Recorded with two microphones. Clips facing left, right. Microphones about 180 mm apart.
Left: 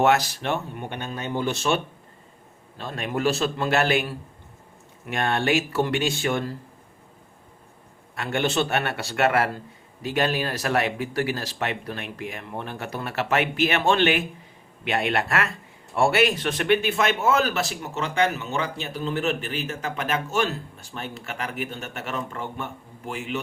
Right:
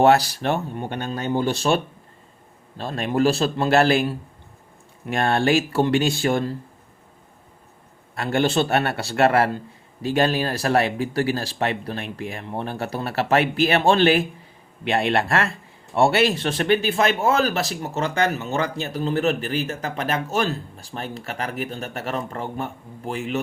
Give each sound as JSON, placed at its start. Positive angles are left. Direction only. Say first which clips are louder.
{"t": 0.0, "sound": "speech", "louder": "right 4 dB", "side_deg": -35}
{"t": 8.1, "sound": "speech", "louder": "right 4 dB", "side_deg": -35}